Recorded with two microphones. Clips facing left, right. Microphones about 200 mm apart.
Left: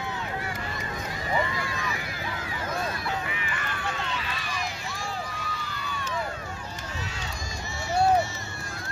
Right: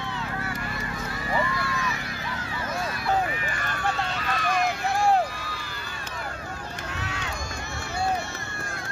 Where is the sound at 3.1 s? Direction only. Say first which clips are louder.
Right 6 dB; 40° right (ahead or behind); by 5.2 s 60° right (ahead or behind).